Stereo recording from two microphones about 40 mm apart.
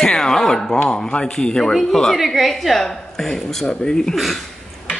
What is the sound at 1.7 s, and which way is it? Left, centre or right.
A man's voice, centre.